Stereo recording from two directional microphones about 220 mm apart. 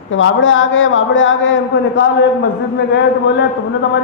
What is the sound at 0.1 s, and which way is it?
Speech, 60° left (ahead or behind).